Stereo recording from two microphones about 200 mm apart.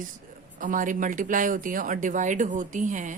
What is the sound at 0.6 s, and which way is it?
A woman's voice, 40° right (ahead or behind).